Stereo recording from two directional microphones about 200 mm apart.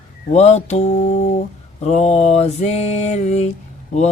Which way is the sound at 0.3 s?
35° left (ahead or behind).